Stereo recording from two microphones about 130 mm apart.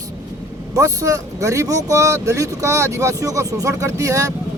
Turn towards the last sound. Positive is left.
turn(degrees=-25)  # may be behind; listen again after turning